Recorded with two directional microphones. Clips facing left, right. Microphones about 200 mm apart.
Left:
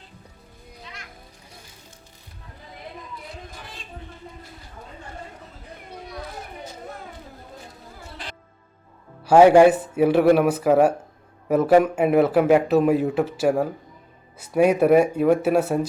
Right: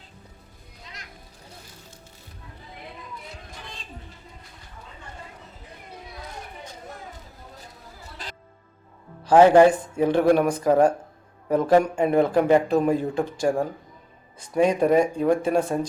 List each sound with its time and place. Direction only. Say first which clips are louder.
8.2 s music: left 1 dB; 45° right (ahead or behind)
9.2 s speech: left 2 dB; 10° left (ahead or behind)